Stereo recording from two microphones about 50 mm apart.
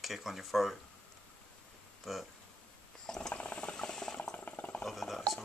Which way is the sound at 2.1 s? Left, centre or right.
Centre.